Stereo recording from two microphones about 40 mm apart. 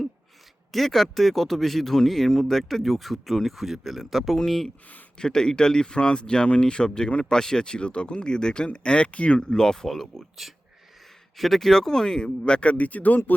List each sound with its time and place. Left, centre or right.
0.7 s speech: centre
4.4 s speech: centre; by 9.4 s left
9.4 s speech: centre
11.3 s speech: centre; by 13.3 s left